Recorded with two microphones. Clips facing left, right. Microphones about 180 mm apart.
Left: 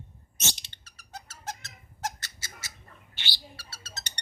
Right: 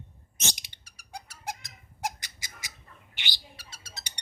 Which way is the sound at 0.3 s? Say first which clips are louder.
Even; 15° right (ahead or behind).